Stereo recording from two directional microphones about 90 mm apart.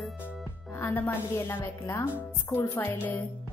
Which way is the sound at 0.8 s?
25° left (ahead or behind).